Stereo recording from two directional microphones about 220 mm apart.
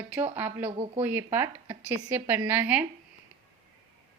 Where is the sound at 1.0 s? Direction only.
10° right (ahead or behind).